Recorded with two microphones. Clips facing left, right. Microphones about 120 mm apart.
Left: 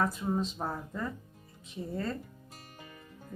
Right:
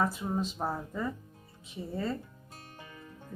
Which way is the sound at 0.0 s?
5° right (ahead or behind).